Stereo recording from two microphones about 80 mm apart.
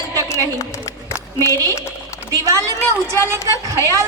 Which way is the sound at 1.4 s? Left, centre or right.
Left.